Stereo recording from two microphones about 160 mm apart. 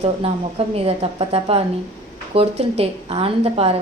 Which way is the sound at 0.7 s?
40° right (ahead or behind).